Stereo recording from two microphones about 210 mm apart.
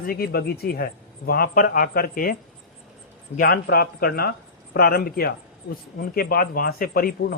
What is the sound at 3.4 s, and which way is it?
A man's voice, 45° left (ahead or behind).